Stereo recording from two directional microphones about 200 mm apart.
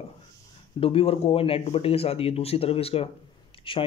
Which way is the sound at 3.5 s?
25° left (ahead or behind).